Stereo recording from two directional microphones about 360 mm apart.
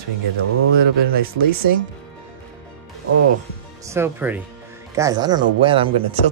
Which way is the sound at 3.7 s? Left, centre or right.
Centre.